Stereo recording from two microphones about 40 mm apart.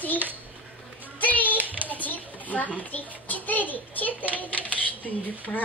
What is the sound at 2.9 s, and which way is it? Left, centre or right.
A child's voice, left.